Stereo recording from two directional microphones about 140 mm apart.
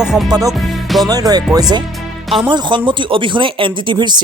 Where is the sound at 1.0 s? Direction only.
25° right (ahead or behind).